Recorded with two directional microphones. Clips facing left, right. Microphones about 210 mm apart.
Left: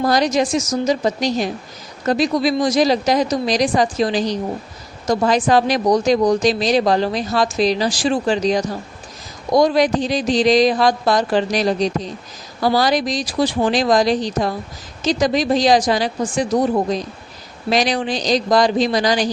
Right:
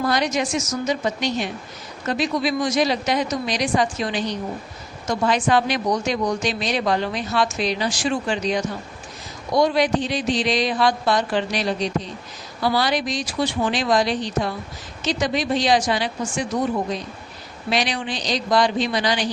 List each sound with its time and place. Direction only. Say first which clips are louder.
0.0 s a woman's voice: left 5 dB; 40° left (ahead or behind)